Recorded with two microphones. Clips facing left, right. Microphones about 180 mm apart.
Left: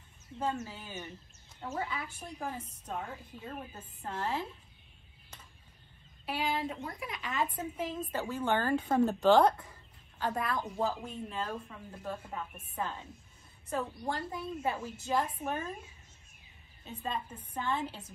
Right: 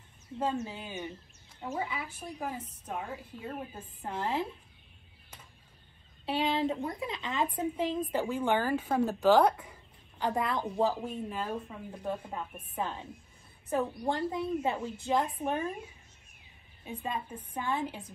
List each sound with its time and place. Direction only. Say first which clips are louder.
0.6 s a woman's voice: right 5 dB; 25° right (ahead or behind)
0.8 s speech: right 4 dB; 10° right (ahead or behind)
6.2 s a woman's voice: right 5 dB; 25° right (ahead or behind)
8.0 s speech: right 4 dB; 10° right (ahead or behind)
11.1 s speech: right 3 dB; 10° right (ahead or behind)
12.1 s a woman's voice: right 3 dB; 20° right (ahead or behind)
16.8 s speech: right 1 dB; 10° right (ahead or behind)